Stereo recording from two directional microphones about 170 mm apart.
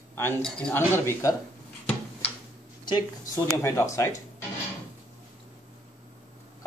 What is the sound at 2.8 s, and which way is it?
Speech, 25° left (ahead or behind).